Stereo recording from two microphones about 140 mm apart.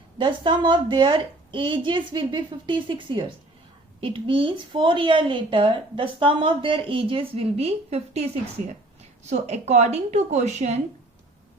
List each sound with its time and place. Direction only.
0.2 s a woman's voice: 35° right (ahead or behind); by 10.8 s 50° right (ahead or behind)